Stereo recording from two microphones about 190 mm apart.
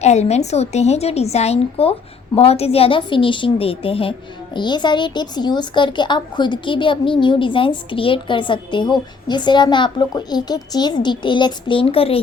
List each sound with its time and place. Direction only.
0.0 s a woman's voice: 35° left (ahead or behind)